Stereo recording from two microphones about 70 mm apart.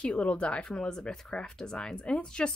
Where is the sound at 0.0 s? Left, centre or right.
Centre.